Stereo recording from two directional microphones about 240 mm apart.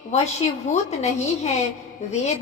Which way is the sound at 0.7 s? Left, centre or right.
Left.